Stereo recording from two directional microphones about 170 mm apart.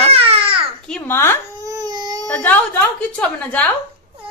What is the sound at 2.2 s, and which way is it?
Speech, 10° left (ahead or behind).